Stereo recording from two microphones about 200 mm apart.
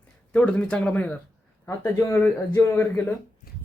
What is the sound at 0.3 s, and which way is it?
Speech, 5° left (ahead or behind).